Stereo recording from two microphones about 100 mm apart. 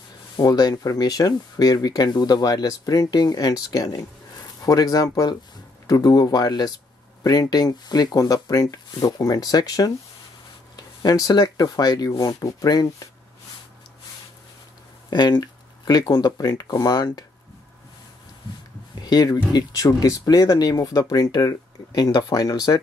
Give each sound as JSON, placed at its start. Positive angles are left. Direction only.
{"t": 0.4, "sound": "speech", "side_deg": 40}
{"t": 15.0, "sound": "speech", "side_deg": 45}
{"t": 18.9, "sound": "speech", "side_deg": 40}